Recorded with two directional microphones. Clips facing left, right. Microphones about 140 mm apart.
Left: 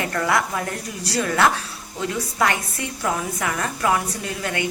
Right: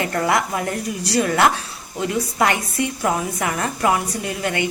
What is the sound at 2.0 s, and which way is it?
A woman's voice, 20° right (ahead or behind).